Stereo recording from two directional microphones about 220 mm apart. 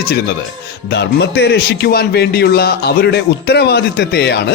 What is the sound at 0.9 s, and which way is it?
Speech, 50° left (ahead or behind).